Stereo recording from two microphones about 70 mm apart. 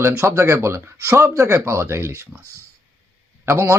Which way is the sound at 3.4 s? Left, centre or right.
Right.